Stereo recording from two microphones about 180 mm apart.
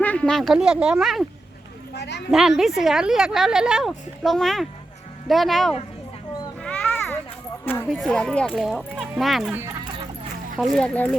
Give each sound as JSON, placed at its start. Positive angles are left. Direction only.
{"t": 0.0, "sound": "speech", "side_deg": 5}
{"t": 2.0, "sound": "speech", "side_deg": 70}
{"t": 2.3, "sound": "speech", "side_deg": 0}
{"t": 6.6, "sound": "a sound", "side_deg": 5}
{"t": 7.9, "sound": "speech", "side_deg": 0}
{"t": 10.8, "sound": "speech", "side_deg": 5}